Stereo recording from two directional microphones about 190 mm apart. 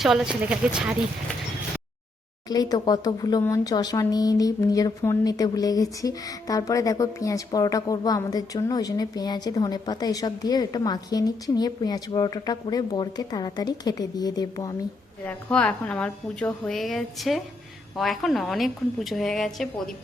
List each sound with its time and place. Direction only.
0.0 s a woman's voice: centre (ahead or behind)
2.5 s speech: 20° left (ahead or behind)
15.3 s a woman's voice: 5° left (ahead or behind)